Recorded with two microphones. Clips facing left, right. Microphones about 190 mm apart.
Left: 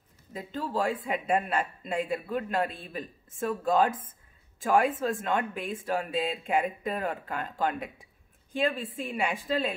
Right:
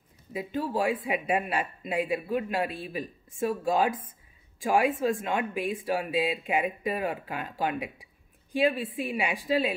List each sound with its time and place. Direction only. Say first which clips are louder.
0.3 s speech: right 3 dB; 15° right (ahead or behind)
5.4 s speech: right 3 dB; 5° right (ahead or behind)